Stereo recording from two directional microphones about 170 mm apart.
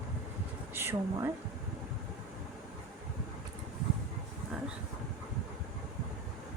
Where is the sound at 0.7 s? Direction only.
15° right (ahead or behind).